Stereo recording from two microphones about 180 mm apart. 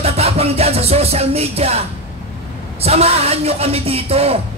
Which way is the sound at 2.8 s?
35° right (ahead or behind).